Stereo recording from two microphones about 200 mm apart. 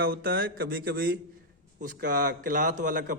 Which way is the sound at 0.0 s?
50° right (ahead or behind).